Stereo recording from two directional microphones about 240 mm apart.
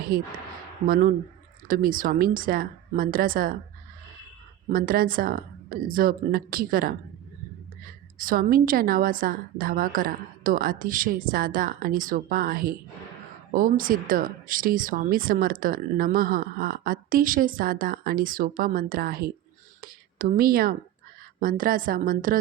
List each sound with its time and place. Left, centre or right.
0.1 s speech: right
1.6 s speech: right
4.7 s speech: right